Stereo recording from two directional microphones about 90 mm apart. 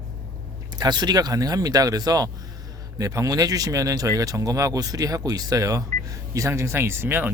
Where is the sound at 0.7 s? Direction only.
50° right (ahead or behind); by 7.3 s 25° right (ahead or behind).